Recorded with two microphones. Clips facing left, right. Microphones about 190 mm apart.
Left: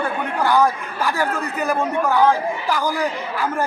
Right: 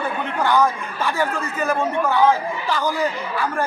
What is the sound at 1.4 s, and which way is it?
Speech, 15° left (ahead or behind).